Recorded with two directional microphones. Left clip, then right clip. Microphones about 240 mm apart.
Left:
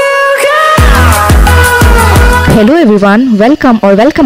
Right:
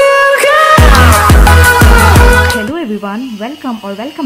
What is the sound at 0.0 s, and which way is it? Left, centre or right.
Music, centre.